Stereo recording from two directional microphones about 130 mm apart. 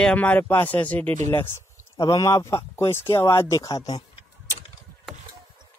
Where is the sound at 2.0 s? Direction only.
25° left (ahead or behind).